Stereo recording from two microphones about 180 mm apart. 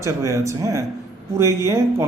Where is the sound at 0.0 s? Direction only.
15° right (ahead or behind).